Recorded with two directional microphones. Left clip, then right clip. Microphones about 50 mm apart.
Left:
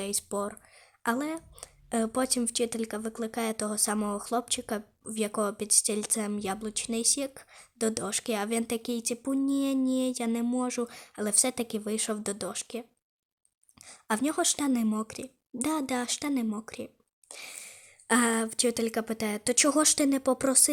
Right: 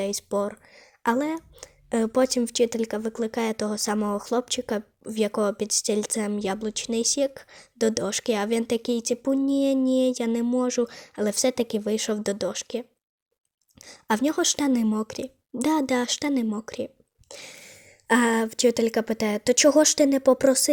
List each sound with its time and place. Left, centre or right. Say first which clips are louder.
0.0 s a woman's voice: right 7 dB; centre; by 16.5 s right
16.6 s a sound: right 8 dB; right
18.3 s speech: right 6 dB; centre
19.5 s speech: right 7 dB; centre